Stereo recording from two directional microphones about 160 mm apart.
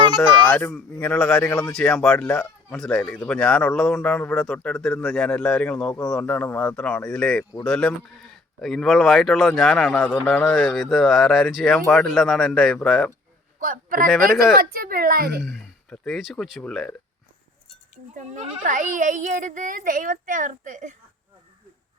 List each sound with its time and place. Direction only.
0.2 s a man's voice: 10° left (ahead or behind)
2.1 s a man's voice: 15° left (ahead or behind)
2.7 s a man's voice: 5° left (ahead or behind)
13.6 s speech: 60° right (ahead or behind); by 15.4 s 75° right (ahead or behind)
15.4 s speech: centre (ahead or behind)
18.1 s a child's voice: 50° right (ahead or behind)